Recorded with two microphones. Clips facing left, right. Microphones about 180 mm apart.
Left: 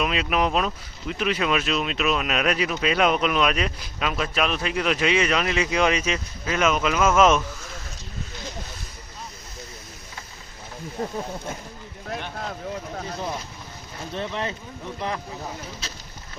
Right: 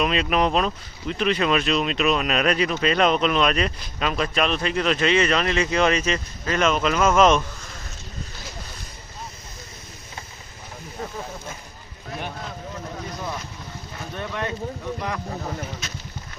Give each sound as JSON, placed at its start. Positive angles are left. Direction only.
{"t": 0.0, "sound": "speech", "side_deg": 5}
{"t": 14.2, "sound": "speech", "side_deg": 25}